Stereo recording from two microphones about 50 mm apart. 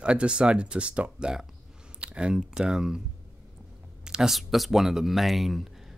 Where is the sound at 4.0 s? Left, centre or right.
Centre.